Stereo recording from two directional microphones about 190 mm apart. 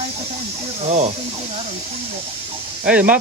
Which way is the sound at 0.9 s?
35° right (ahead or behind).